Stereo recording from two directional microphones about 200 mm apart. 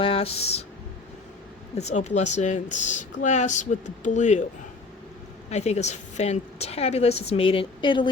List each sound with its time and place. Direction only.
0.0 s speech: 30° left (ahead or behind)
1.8 s speech: 35° left (ahead or behind)
5.5 s speech: 35° left (ahead or behind)